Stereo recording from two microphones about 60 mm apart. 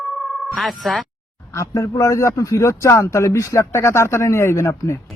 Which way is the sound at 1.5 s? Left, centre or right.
Left.